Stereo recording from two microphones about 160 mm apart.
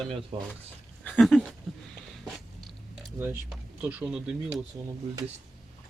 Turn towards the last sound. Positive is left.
turn(degrees=-10)  # may be behind; listen again after turning